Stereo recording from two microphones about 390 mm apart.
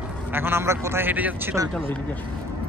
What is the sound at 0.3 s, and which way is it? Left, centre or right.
A man's voice, centre.